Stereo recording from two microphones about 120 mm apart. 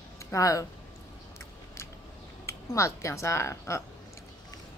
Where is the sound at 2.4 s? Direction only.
25° left (ahead or behind).